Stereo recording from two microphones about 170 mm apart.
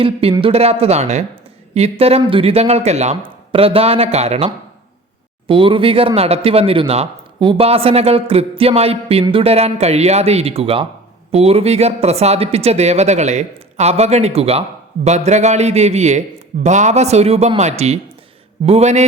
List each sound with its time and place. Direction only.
0.0 s speech: 35° right (ahead or behind)